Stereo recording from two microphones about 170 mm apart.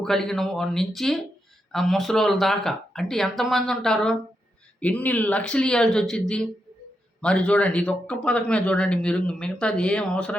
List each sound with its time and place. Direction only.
0.0 s a man's voice: centre (ahead or behind)